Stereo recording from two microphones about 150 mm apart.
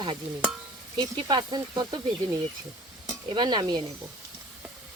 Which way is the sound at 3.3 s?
30° right (ahead or behind).